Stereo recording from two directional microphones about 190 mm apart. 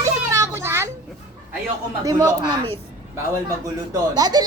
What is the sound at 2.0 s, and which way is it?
Speech, 20° right (ahead or behind).